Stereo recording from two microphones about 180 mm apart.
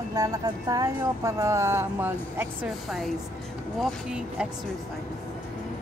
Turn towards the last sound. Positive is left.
turn(degrees=-5)  # may be behind; listen again after turning